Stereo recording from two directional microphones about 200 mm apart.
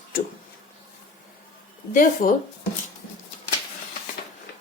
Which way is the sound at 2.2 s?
45° left (ahead or behind).